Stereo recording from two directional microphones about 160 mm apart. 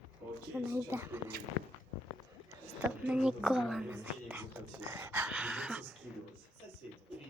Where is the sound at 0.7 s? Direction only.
15° right (ahead or behind).